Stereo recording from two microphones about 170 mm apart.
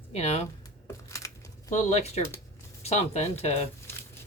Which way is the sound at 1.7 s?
40° left (ahead or behind).